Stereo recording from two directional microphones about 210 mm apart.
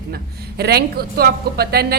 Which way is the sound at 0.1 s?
50° right (ahead or behind).